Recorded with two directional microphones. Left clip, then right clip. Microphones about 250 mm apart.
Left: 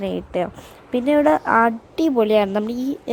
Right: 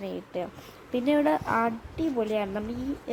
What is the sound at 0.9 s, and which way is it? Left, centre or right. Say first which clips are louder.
A woman's voice: left 8 dB; centre.